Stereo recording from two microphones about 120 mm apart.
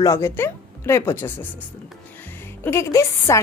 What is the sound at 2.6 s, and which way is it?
Speech, 25° left (ahead or behind).